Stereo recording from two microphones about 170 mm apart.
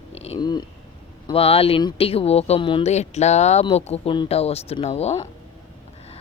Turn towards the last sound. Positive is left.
turn(degrees=40)  # may be behind; listen again after turning